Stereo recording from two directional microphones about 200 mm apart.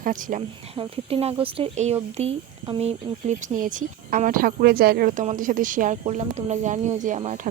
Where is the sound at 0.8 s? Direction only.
30° right (ahead or behind).